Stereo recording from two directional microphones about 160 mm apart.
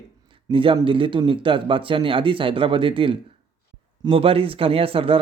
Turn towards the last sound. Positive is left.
turn(degrees=-35)  # may be behind; listen again after turning